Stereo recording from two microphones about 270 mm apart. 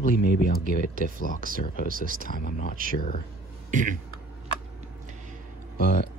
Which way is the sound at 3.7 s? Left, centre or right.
Right.